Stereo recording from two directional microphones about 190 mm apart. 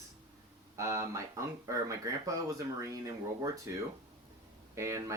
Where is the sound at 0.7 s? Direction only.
15° right (ahead or behind).